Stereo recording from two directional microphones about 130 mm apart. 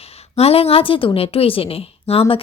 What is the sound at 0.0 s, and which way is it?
Speech, 50° left (ahead or behind).